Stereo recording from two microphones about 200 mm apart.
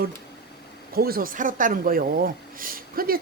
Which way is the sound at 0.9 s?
50° right (ahead or behind).